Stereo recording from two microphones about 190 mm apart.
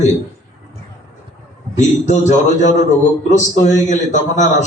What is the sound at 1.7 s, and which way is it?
A man's voice, 40° left (ahead or behind).